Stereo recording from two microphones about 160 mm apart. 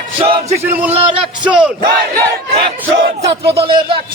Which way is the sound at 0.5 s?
15° right (ahead or behind).